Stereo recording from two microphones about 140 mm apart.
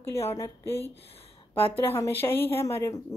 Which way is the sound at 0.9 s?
45° left (ahead or behind).